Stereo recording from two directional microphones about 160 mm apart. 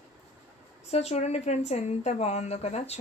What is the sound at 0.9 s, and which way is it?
A woman's voice, 40° left (ahead or behind).